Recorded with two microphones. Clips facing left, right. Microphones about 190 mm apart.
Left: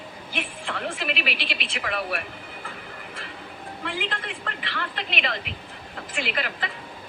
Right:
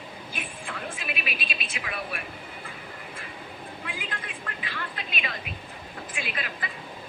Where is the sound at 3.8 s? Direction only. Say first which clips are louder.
Left 8 dB; 75° left (ahead or behind).